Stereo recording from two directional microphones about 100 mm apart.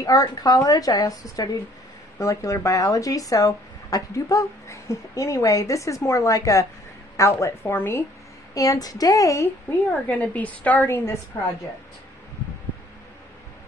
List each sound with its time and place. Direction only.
0.0 s a woman's voice: 35° left (ahead or behind)
8.5 s speech: 40° left (ahead or behind)
10.0 s a woman's voice: 15° left (ahead or behind)